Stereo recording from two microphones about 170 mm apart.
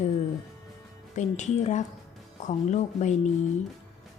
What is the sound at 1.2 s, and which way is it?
A woman's voice, 45° left (ahead or behind).